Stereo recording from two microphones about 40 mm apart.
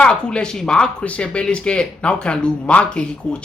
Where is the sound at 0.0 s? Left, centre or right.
Left.